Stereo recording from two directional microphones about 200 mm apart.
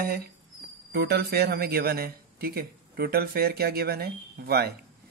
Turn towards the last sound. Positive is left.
turn(degrees=-50)  # may be behind; listen again after turning